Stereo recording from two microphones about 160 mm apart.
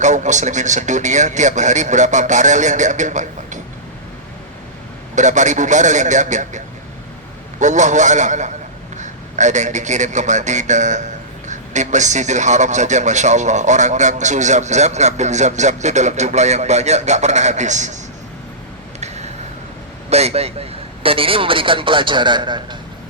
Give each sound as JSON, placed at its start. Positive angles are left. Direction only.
{"t": 0.0, "sound": "a man's voice", "side_deg": -50}
{"t": 5.1, "sound": "a man's voice", "side_deg": -50}
{"t": 7.6, "sound": "a man's voice", "side_deg": -50}
{"t": 18.9, "sound": "a sound", "side_deg": -45}
{"t": 20.1, "sound": "a man's voice", "side_deg": -40}